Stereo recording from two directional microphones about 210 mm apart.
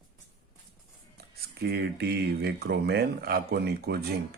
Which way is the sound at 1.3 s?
50° right (ahead or behind).